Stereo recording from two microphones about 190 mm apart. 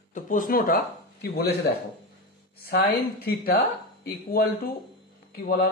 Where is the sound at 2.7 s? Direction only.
55° left (ahead or behind).